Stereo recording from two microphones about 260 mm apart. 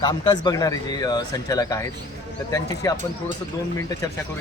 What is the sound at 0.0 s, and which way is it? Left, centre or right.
Speech, centre.